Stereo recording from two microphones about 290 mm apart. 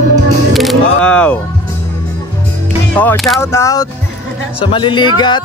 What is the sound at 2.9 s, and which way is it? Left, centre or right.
Speech, centre.